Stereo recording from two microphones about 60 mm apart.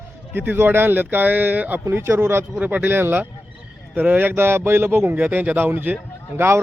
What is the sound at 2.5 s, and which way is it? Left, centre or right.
Speech, right.